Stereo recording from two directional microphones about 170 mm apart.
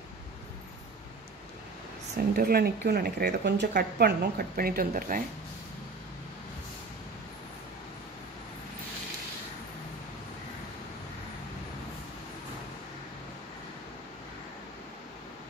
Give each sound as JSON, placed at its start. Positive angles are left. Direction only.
{"t": 2.3, "sound": "speech", "side_deg": -60}